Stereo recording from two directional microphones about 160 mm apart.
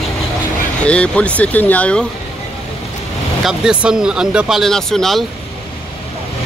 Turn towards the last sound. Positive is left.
turn(degrees=0)  # may be behind; listen again after turning